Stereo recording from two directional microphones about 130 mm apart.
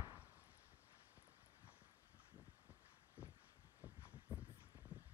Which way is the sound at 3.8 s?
10° right (ahead or behind).